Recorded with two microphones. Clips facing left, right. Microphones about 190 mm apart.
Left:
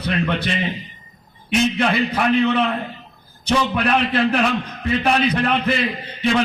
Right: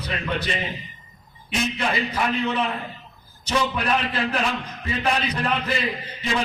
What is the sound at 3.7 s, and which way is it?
A man's voice, 60° left (ahead or behind).